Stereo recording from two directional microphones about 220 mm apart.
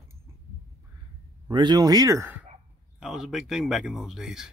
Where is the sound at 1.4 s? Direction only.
20° right (ahead or behind).